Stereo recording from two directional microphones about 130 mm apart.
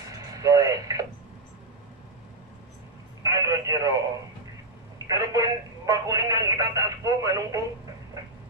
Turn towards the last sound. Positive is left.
turn(degrees=-25)  # may be behind; listen again after turning